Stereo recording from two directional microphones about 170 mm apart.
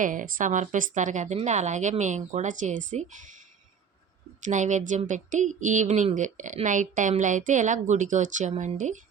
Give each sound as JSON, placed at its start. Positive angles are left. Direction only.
{"t": 0.0, "sound": "a woman's voice", "side_deg": -50}
{"t": 4.4, "sound": "a woman's voice", "side_deg": -45}